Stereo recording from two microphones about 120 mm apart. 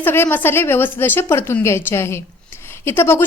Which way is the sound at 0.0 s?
20° left (ahead or behind).